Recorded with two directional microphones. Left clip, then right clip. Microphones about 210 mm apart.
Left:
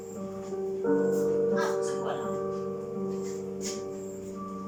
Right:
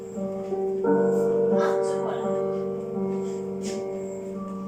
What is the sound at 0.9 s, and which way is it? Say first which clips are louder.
Music: right 4 dB; 30° right (ahead or behind).